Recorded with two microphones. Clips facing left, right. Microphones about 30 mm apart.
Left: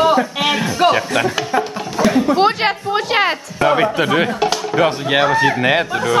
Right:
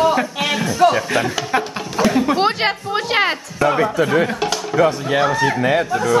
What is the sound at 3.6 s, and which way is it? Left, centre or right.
Speech, left.